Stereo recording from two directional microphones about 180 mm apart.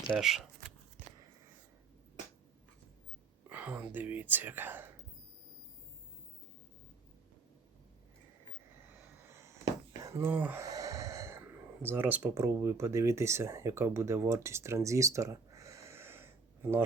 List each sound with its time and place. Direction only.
0.2 s speech: centre (ahead or behind)
3.5 s speech: 10° right (ahead or behind)
9.3 s a sound: 15° right (ahead or behind)
10.0 s speech: 15° right (ahead or behind)